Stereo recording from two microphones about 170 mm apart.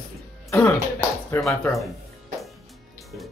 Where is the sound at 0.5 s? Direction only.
10° left (ahead or behind).